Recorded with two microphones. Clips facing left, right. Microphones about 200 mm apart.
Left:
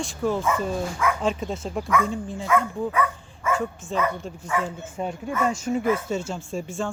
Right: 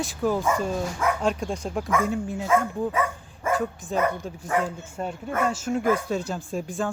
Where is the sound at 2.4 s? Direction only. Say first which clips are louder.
Even; 25° right (ahead or behind).